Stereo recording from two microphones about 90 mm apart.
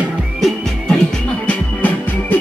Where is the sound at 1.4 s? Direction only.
20° left (ahead or behind).